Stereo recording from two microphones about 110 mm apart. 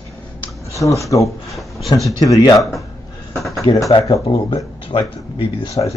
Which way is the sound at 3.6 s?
55° left (ahead or behind).